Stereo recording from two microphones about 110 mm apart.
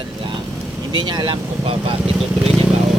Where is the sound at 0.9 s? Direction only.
45° right (ahead or behind).